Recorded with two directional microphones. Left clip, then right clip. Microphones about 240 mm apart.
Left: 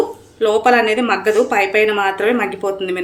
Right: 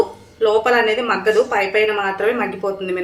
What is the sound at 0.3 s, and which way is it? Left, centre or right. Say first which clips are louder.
Speech: left 2 dB; left.